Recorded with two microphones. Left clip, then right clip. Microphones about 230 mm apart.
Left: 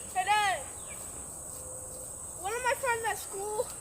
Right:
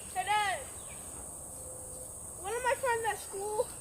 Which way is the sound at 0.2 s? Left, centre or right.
Left.